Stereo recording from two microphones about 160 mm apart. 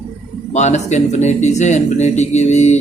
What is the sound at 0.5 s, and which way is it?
Speech, 45° left (ahead or behind).